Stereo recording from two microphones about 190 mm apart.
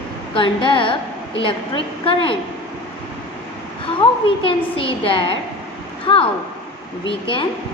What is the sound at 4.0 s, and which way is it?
A woman's voice, 30° left (ahead or behind).